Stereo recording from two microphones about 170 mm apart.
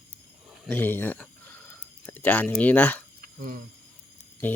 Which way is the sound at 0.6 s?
10° left (ahead or behind).